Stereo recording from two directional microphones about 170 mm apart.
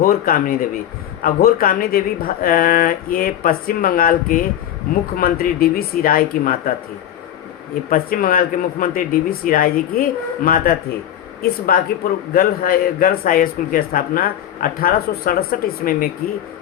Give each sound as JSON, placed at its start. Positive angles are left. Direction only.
{"t": 0.0, "sound": "a man's voice", "side_deg": 60}
{"t": 7.9, "sound": "a man's voice", "side_deg": 55}